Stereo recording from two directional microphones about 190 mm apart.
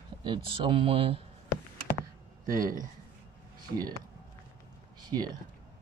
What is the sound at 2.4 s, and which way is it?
Speech, 45° right (ahead or behind).